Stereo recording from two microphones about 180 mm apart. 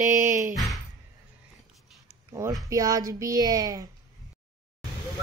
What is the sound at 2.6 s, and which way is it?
A woman's voice, 20° right (ahead or behind).